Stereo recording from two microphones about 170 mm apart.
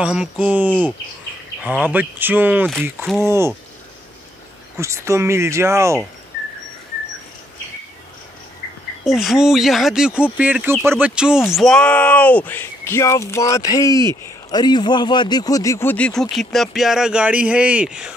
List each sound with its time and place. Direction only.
0.0 s speech: 5° right (ahead or behind)
0.7 s speech: 5° left (ahead or behind)
1.6 s speech: 10° right (ahead or behind)
4.7 s speech: 15° right (ahead or behind)
9.0 s speech: centre (ahead or behind)